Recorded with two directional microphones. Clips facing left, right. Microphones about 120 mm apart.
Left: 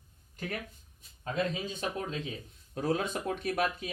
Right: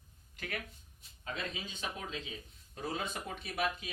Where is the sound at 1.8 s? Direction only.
45° left (ahead or behind).